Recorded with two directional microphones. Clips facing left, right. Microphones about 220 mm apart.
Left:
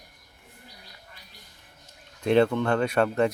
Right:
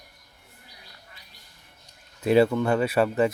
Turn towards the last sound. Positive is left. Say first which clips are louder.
# right 1 dB
turn(degrees=-5)  # may be behind; listen again after turning